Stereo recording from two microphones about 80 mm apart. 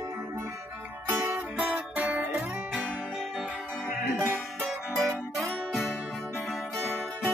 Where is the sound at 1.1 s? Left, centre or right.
Right.